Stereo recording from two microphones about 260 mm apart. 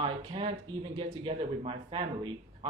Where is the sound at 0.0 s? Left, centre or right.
Right.